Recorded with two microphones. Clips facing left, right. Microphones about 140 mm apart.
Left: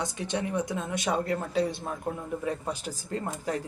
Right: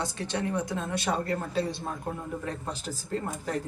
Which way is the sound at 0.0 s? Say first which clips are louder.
Even; 20° left (ahead or behind).